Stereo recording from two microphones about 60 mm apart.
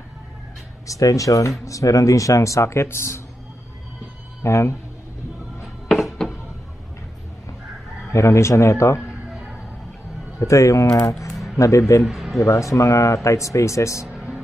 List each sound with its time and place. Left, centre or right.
0.8 s speech: left
4.4 s speech: left
5.9 s music: centre
8.1 s a man's voice: left
10.4 s a man's voice: left
12.0 s speech: centre
12.4 s speech: left